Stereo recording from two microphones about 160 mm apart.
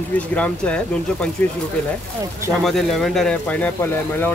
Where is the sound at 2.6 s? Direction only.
Centre (ahead or behind).